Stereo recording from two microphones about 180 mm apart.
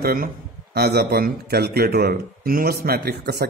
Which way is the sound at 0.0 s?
55° right (ahead or behind).